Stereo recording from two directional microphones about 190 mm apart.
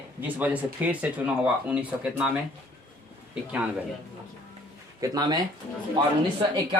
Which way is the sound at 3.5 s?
5° right (ahead or behind).